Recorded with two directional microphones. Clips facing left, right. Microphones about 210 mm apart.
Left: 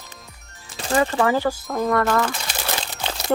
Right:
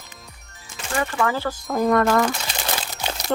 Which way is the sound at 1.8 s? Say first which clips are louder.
Right 3 dB; 20° right (ahead or behind).